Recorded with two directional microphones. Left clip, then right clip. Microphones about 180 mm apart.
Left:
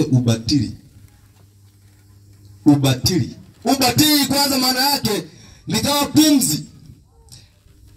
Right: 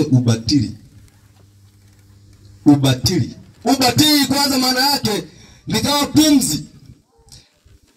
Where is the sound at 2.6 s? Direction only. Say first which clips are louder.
Right 2 dB; 10° left (ahead or behind).